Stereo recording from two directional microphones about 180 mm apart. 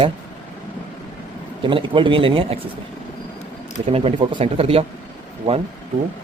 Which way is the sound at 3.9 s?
30° right (ahead or behind).